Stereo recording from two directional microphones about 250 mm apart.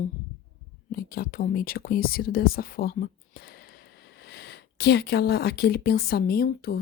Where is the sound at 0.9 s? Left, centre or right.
Left.